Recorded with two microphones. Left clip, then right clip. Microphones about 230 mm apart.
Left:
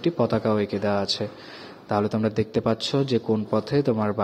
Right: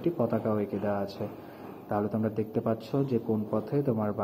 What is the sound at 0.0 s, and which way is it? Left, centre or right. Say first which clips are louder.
Speech: left 6 dB; left.